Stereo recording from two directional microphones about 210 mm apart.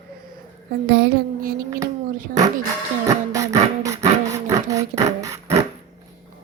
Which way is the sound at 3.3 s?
15° right (ahead or behind).